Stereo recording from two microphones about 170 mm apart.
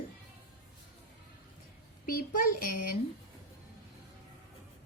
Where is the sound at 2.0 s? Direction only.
55° left (ahead or behind).